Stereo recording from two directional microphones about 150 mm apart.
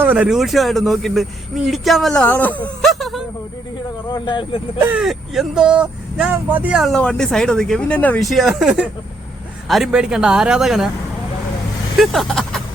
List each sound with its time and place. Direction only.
0.0 s speech: 10° right (ahead or behind); by 2.6 s 10° left (ahead or behind)
2.8 s a sound: centre (ahead or behind)
4.1 s speech: 35° left (ahead or behind)
4.8 s speech: 10° right (ahead or behind); by 8.3 s 10° left (ahead or behind)
8.3 s speech: centre (ahead or behind)
11.9 s speech: centre (ahead or behind)